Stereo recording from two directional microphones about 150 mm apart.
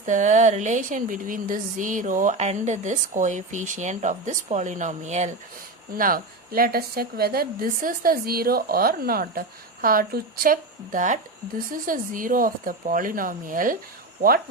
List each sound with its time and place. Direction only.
0.0 s speech: 55° right (ahead or behind)
6.0 s a woman's voice: 75° right (ahead or behind)
14.2 s speech: 80° right